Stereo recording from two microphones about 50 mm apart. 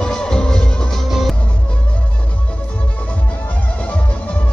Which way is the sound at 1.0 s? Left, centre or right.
Centre.